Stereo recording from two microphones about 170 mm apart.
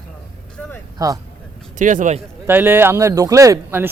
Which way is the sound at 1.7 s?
50° right (ahead or behind).